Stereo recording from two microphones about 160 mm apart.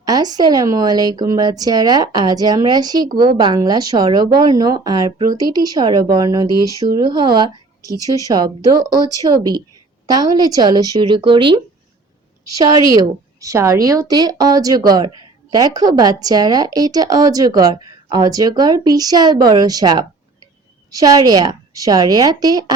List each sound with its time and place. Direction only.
0.0 s a woman's voice: 25° right (ahead or behind)